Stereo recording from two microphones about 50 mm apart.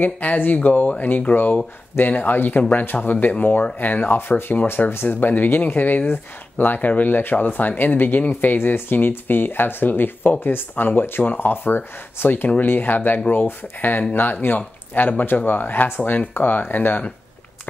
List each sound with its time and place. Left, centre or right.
0.0 s speech: left
16.3 s speech: left